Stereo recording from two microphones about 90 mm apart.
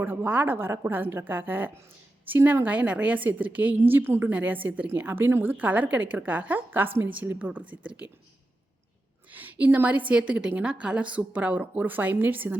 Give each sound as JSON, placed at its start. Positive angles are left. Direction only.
{"t": 0.0, "sound": "a woman's voice", "side_deg": -20}
{"t": 9.3, "sound": "a woman's voice", "side_deg": -20}